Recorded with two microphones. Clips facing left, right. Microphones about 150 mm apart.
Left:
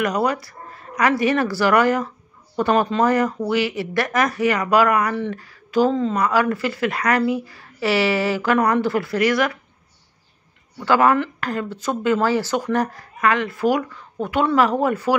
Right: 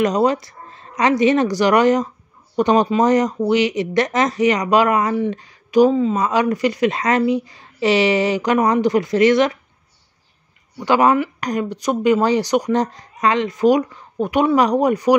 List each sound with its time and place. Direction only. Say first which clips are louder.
0.0 s speech: right 4 dB; 25° right (ahead or behind)
10.8 s speech: right 2 dB; 20° right (ahead or behind)